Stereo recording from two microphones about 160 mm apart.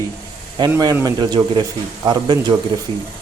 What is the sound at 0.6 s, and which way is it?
Speech, 25° right (ahead or behind).